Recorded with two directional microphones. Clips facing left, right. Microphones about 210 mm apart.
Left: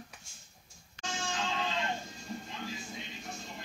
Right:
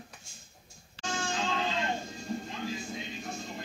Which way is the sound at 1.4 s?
35° right (ahead or behind).